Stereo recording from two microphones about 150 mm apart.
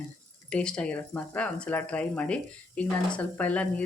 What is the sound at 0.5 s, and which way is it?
Speech, 5° left (ahead or behind).